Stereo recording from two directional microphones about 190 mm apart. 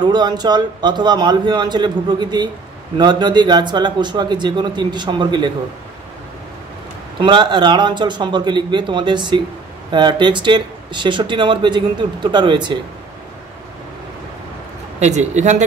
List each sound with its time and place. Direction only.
0.0 s speech: 20° right (ahead or behind)
7.2 s speech: 25° right (ahead or behind)
15.0 s speech: 35° right (ahead or behind)